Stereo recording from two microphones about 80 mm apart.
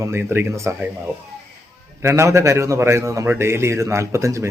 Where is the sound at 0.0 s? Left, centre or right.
Right.